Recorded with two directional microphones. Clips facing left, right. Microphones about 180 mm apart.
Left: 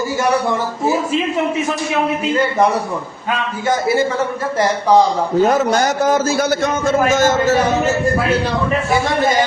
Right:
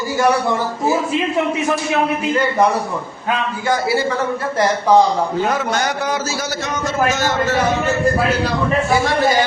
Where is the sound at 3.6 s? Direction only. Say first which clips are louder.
Left 3 dB; 20° left (ahead or behind).